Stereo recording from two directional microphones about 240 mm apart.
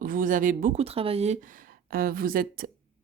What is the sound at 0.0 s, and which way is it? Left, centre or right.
Speech, right.